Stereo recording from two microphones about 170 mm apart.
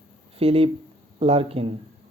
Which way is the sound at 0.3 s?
35° right (ahead or behind).